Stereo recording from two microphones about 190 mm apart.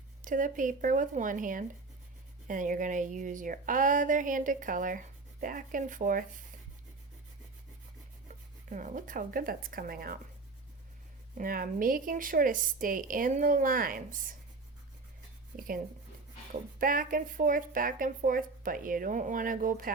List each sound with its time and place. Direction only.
0.2 s a woman's voice: 45° right (ahead or behind)
8.7 s a woman's voice: 40° right (ahead or behind)
11.3 s a woman's voice: 50° right (ahead or behind)
15.5 s a woman's voice: 50° right (ahead or behind)